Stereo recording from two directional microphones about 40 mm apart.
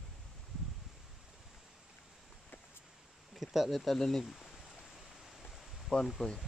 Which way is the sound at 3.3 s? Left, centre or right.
Centre.